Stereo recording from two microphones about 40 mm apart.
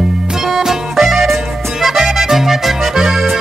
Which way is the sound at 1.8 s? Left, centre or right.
Centre.